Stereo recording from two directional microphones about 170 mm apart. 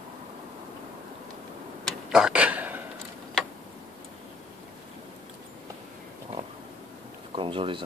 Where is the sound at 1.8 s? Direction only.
5° right (ahead or behind).